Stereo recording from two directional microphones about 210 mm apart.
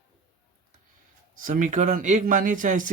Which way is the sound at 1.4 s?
40° right (ahead or behind).